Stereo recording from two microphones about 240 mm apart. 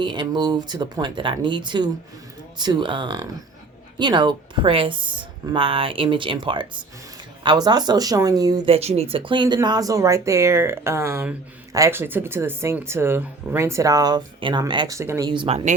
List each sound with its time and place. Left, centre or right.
0.0 s a woman's voice: centre